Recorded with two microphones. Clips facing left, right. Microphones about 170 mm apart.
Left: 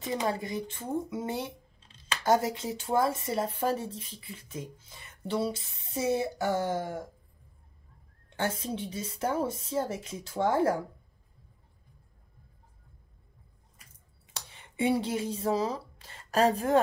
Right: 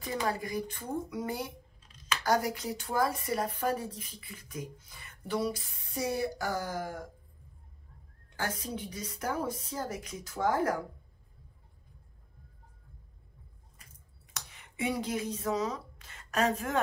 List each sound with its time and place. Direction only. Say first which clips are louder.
0.0 s speech: left 2 dB; 20° left (ahead or behind)
8.4 s speech: left 4 dB; 25° left (ahead or behind)
14.3 s speech: left 2 dB; 30° left (ahead or behind)